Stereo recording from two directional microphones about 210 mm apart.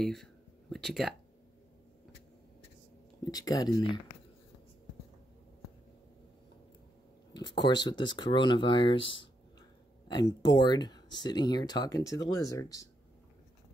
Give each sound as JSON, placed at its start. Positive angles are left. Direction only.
{"t": 0.0, "sound": "a sound", "side_deg": 0}
{"t": 3.3, "sound": "speech", "side_deg": 20}
{"t": 7.3, "sound": "speech", "side_deg": 20}